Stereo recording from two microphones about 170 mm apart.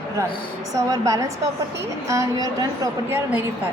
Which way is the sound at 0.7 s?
20° right (ahead or behind).